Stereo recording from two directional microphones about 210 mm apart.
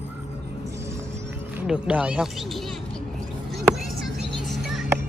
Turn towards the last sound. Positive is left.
turn(degrees=0)  # may be behind; listen again after turning